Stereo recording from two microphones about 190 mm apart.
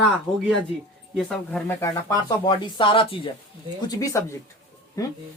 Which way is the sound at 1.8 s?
20° left (ahead or behind).